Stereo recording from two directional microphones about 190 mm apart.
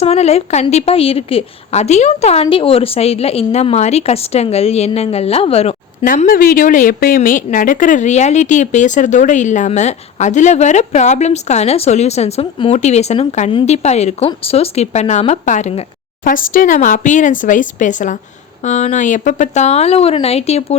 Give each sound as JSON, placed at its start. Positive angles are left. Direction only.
{"t": 0.0, "sound": "a woman's voice", "side_deg": 35}
{"t": 6.1, "sound": "a woman's voice", "side_deg": 45}
{"t": 16.3, "sound": "a woman's voice", "side_deg": 45}